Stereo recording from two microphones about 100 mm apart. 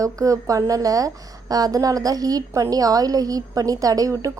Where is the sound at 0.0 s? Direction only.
35° right (ahead or behind).